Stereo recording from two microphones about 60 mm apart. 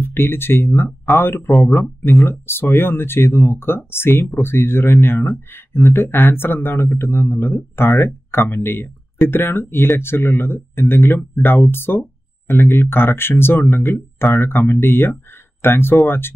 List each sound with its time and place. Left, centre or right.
0.0 s speech: left